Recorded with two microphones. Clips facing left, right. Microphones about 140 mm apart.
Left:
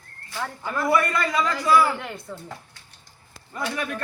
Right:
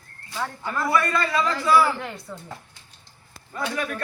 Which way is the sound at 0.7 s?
20° left (ahead or behind).